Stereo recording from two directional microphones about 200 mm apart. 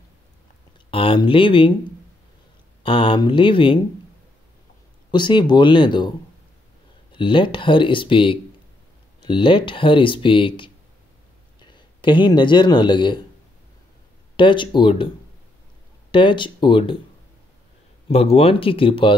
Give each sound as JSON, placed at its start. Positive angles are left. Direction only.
{"t": 0.8, "sound": "speech", "side_deg": 25}
{"t": 2.8, "sound": "speech", "side_deg": 25}
{"t": 5.1, "sound": "speech", "side_deg": 25}
{"t": 14.3, "sound": "speech", "side_deg": 25}
{"t": 16.1, "sound": "speech", "side_deg": 25}
{"t": 18.0, "sound": "speech", "side_deg": 30}